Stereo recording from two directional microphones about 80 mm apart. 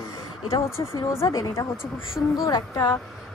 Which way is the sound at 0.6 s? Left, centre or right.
Left.